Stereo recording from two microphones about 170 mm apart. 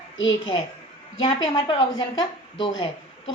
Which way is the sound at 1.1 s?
30° left (ahead or behind).